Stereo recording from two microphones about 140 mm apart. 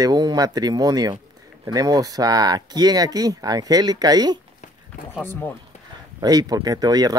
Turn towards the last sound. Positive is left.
turn(degrees=-25)  # may be behind; listen again after turning